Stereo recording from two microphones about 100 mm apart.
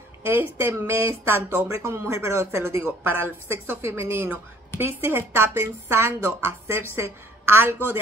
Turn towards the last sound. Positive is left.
turn(degrees=-25)  # may be behind; listen again after turning